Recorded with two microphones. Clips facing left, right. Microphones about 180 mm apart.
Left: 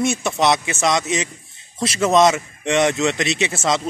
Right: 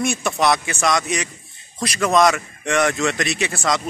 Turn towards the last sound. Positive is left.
turn(degrees=20)  # may be behind; listen again after turning